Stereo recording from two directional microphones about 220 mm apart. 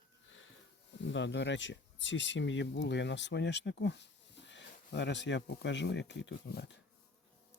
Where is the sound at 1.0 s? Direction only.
55° left (ahead or behind).